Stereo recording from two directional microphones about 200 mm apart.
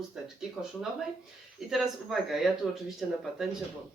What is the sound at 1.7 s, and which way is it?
Speech, centre (ahead or behind).